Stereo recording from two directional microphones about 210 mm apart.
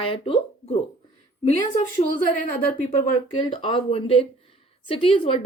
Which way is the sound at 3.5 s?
25° left (ahead or behind).